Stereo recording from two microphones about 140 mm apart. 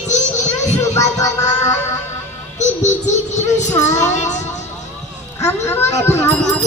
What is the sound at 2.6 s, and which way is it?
A child's voice, 55° left (ahead or behind).